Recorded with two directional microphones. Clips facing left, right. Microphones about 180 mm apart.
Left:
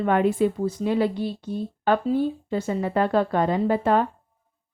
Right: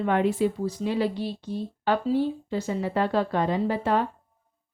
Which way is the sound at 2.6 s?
55° left (ahead or behind).